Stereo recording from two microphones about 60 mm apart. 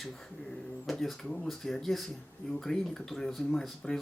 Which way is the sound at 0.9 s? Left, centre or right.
Centre.